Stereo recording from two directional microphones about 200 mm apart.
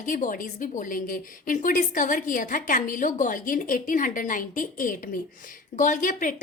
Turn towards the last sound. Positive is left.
turn(degrees=40)  # may be behind; listen again after turning